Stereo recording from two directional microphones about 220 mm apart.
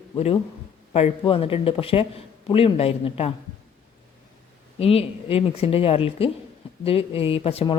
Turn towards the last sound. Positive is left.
turn(degrees=25)  # may be behind; listen again after turning